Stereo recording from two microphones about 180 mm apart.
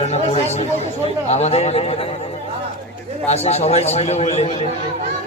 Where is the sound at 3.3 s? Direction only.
35° left (ahead or behind).